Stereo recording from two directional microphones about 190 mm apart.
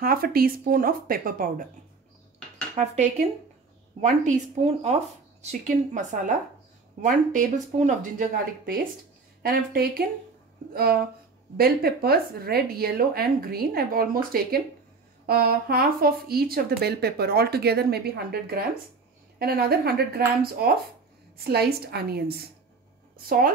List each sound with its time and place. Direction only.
0.0 s speech: 50° right (ahead or behind)
2.7 s speech: 40° right (ahead or behind); by 22.2 s 55° right (ahead or behind)
23.2 s speech: 50° right (ahead or behind)